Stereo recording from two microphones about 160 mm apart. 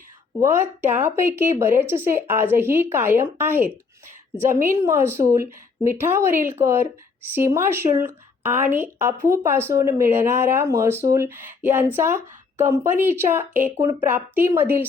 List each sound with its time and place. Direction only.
0.3 s a woman's voice: 15° right (ahead or behind)